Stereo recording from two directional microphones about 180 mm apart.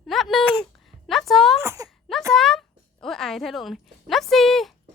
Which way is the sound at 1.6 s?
15° right (ahead or behind).